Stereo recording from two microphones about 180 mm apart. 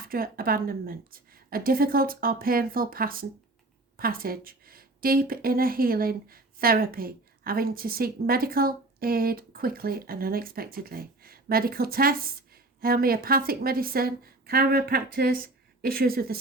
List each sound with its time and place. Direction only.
0.0 s a woman's voice: 55° right (ahead or behind)